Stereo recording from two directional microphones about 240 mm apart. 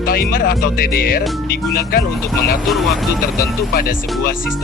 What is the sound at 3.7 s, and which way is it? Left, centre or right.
Speech, left.